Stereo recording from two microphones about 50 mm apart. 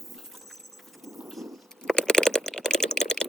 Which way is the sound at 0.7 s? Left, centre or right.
Centre.